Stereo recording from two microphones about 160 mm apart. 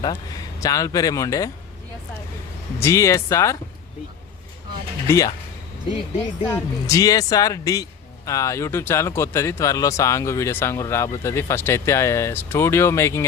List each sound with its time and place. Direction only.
0.0 s speech: 25° left (ahead or behind)
2.8 s speech: 20° left (ahead or behind)
5.0 s speech: 20° left (ahead or behind)
6.5 s speech: 20° left (ahead or behind)